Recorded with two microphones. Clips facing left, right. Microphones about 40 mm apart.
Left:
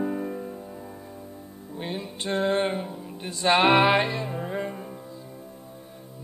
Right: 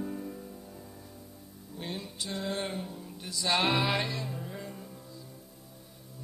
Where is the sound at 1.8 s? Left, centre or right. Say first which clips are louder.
Left 6 dB; left.